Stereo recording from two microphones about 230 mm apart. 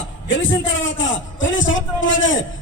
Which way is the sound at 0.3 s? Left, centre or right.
Left.